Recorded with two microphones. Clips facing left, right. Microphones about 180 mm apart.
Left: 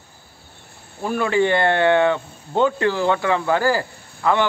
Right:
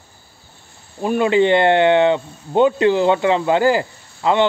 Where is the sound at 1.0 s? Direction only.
20° right (ahead or behind).